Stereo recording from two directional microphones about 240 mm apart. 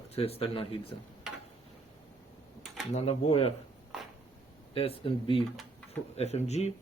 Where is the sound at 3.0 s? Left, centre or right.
Left.